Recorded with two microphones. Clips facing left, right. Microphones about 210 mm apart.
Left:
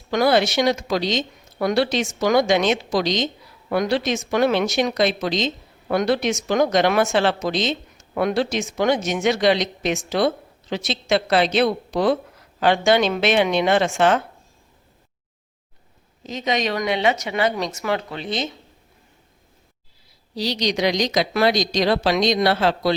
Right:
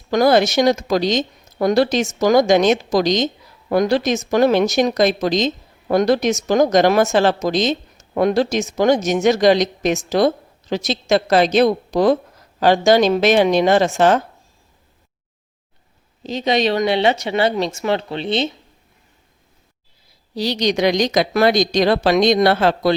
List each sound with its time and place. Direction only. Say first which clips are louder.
0.1 s speech: right 4 dB; 40° right (ahead or behind)
16.2 s speech: right 5 dB; 30° right (ahead or behind)
20.3 s speech: right 4 dB; 55° right (ahead or behind)